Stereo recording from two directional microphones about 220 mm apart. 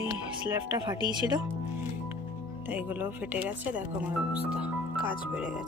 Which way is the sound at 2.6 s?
10° right (ahead or behind).